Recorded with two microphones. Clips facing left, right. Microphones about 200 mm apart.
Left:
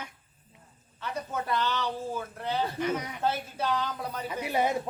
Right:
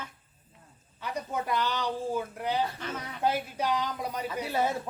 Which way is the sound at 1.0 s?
15° right (ahead or behind).